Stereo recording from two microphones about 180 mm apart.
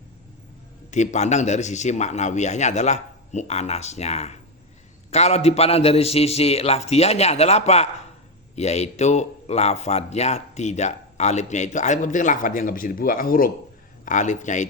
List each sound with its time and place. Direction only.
0.9 s a man's voice: 40° left (ahead or behind)